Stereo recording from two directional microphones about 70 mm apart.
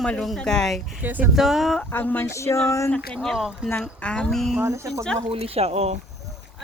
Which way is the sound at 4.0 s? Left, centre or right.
Centre.